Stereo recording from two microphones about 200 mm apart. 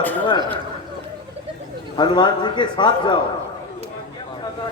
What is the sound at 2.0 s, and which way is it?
A man's voice, 20° left (ahead or behind).